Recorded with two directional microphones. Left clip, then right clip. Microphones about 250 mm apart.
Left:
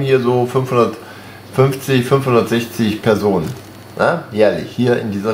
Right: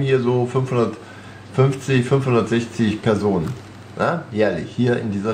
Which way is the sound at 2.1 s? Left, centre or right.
Left.